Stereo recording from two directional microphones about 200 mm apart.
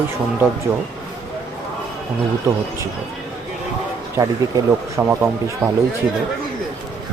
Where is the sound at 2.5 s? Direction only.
15° right (ahead or behind).